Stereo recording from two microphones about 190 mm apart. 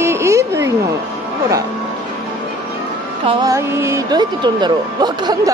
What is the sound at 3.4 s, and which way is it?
Speech, 15° right (ahead or behind).